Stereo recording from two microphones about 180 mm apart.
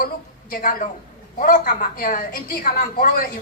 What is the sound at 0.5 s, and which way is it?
A woman's voice, 50° left (ahead or behind).